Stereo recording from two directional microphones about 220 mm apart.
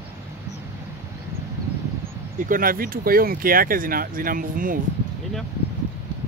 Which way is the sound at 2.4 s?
40° right (ahead or behind).